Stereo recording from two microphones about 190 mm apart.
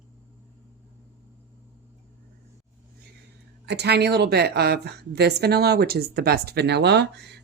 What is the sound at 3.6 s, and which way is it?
A woman's voice, 60° right (ahead or behind).